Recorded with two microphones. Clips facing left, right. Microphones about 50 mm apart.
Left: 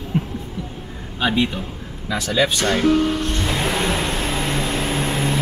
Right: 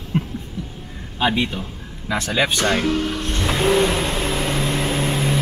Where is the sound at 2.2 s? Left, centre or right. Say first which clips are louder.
Left 1 dB; right.